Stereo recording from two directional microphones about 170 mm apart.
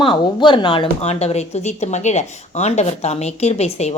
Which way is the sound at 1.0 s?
40° left (ahead or behind).